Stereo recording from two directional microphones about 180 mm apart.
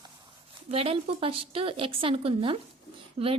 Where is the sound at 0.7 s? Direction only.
35° right (ahead or behind).